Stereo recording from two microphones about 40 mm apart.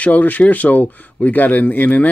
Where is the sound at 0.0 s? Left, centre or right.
Left.